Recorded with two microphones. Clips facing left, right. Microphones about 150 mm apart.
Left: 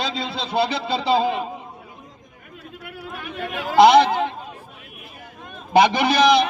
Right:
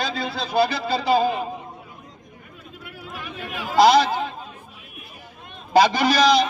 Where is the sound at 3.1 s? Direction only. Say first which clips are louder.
Left 3 dB; 65° left (ahead or behind).